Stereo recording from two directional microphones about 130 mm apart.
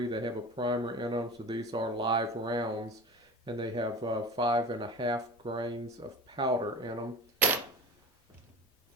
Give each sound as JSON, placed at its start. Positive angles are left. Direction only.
{"t": 0.1, "sound": "speech", "side_deg": -35}